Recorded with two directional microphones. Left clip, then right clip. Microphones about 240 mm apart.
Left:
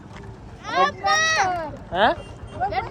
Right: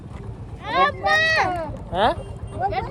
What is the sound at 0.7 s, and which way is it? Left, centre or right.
Speech, right.